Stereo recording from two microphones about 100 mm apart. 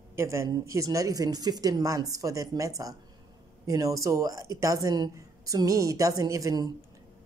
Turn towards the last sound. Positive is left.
turn(degrees=-35)  # may be behind; listen again after turning